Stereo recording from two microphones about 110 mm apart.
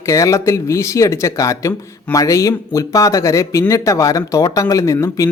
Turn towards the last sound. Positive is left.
turn(degrees=30)  # may be behind; listen again after turning